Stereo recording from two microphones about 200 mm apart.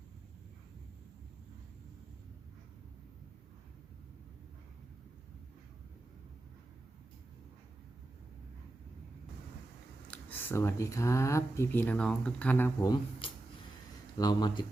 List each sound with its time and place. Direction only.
10.1 s speech: 10° left (ahead or behind)
12.9 s speech: 25° left (ahead or behind)